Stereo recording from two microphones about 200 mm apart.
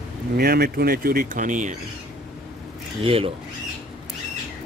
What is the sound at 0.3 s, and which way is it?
Speech, 50° right (ahead or behind).